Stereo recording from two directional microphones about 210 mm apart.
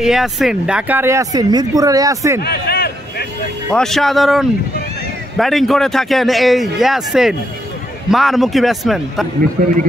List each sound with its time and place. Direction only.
0.0 s speech: centre (ahead or behind)
2.4 s a sound: 50° left (ahead or behind)
3.7 s a man's voice: centre (ahead or behind)